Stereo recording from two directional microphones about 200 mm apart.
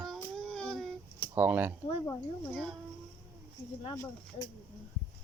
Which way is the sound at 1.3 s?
10° right (ahead or behind).